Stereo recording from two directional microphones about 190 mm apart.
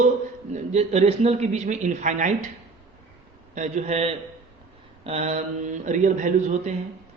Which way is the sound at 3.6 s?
35° right (ahead or behind).